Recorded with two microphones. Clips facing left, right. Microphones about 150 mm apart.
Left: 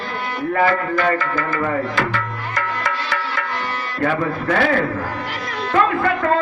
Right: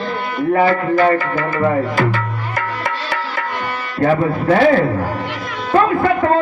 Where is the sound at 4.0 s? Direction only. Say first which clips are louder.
Right 5 dB; 30° right (ahead or behind).